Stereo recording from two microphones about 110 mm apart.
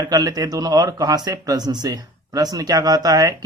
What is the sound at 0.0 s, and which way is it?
Speech, 35° right (ahead or behind).